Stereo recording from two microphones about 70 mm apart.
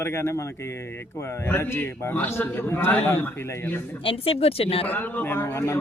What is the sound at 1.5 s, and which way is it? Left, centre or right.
A man's voice, left.